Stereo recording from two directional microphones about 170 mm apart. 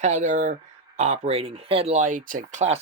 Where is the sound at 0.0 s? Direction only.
45° right (ahead or behind).